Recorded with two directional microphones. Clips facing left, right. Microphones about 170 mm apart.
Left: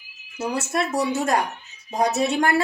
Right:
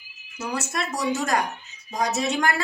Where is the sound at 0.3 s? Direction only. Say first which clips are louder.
Left 4 dB; 30° left (ahead or behind).